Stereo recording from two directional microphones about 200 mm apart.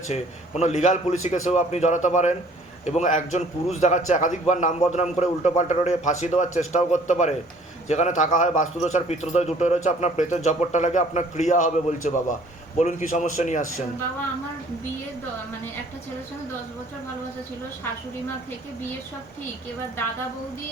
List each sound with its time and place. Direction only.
0.1 s a man's voice: 35° left (ahead or behind)